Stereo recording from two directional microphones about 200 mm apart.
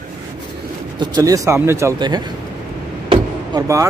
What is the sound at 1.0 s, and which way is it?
Speech, 20° right (ahead or behind).